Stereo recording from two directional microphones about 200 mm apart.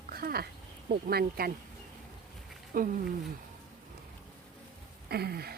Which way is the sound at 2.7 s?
45° right (ahead or behind).